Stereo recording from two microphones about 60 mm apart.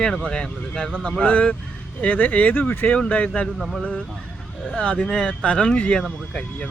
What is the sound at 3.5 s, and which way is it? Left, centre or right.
Speech, centre.